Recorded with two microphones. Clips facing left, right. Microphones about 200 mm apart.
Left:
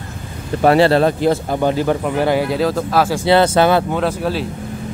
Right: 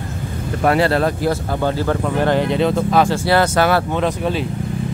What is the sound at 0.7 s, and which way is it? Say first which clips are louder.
Speech: left 4 dB; 30° left (ahead or behind).